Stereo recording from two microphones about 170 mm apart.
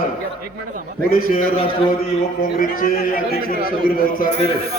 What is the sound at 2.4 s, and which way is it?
A man's voice, 55° left (ahead or behind).